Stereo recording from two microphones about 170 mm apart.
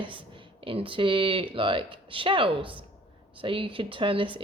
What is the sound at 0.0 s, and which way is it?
Speech, 30° right (ahead or behind).